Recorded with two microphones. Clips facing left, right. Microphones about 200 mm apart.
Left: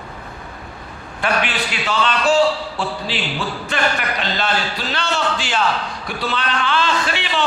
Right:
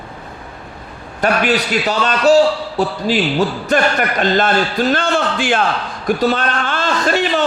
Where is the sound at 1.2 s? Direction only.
40° right (ahead or behind).